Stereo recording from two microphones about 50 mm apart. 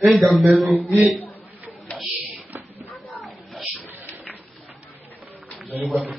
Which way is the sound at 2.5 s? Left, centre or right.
Right.